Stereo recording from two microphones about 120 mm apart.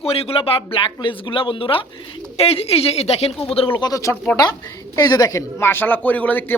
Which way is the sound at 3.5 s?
50° left (ahead or behind).